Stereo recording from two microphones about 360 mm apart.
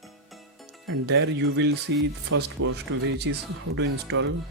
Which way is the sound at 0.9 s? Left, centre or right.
Right.